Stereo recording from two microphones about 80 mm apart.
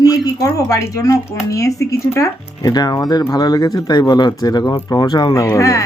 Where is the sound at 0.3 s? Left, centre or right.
Left.